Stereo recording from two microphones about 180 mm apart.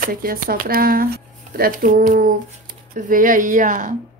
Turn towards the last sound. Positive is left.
turn(degrees=-45)  # may be behind; listen again after turning